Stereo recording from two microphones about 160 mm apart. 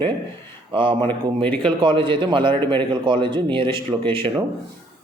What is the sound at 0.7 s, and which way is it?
A man's voice, 30° right (ahead or behind).